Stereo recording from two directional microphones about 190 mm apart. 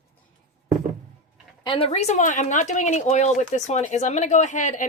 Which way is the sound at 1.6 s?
25° left (ahead or behind).